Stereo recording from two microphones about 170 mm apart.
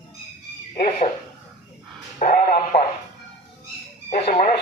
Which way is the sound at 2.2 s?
50° left (ahead or behind).